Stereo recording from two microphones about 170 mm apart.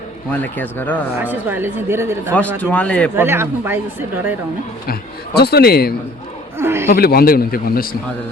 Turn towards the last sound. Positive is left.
turn(degrees=60)  # may be behind; listen again after turning